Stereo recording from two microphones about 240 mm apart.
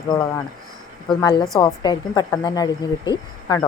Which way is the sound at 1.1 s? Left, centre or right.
Centre.